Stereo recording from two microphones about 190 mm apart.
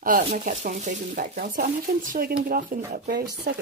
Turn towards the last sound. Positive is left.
turn(degrees=-55)  # may be behind; listen again after turning